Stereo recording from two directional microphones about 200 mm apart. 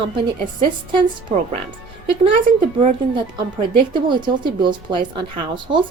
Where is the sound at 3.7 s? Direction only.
25° right (ahead or behind).